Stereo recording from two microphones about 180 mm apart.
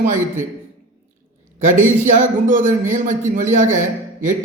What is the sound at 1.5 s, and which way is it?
A man's voice, 45° right (ahead or behind).